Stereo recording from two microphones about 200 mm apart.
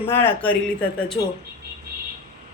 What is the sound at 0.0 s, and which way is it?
Speech, 10° left (ahead or behind).